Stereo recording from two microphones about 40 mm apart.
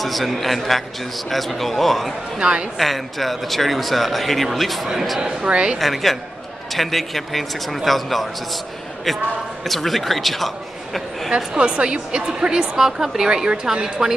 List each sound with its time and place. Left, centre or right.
0.0 s speech: centre
2.3 s a woman's voice: right
2.8 s speech: centre
5.2 s a woman's voice: right
5.8 s speech: centre
9.7 s speech: centre
11.2 s a woman's voice: right